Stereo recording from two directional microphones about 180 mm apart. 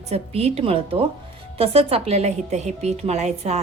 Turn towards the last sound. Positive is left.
turn(degrees=-40)  # may be behind; listen again after turning